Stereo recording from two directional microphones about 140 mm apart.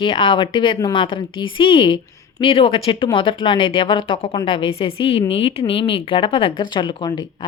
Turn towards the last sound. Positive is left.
turn(degrees=35)  # may be behind; listen again after turning